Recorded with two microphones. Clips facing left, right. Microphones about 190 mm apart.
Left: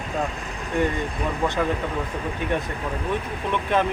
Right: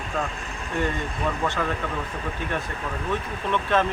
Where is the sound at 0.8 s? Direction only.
15° left (ahead or behind).